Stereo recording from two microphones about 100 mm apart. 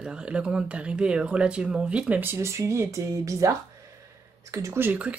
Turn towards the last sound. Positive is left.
turn(degrees=-15)  # may be behind; listen again after turning